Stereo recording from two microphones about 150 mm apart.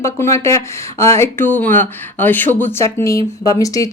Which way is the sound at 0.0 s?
20° left (ahead or behind).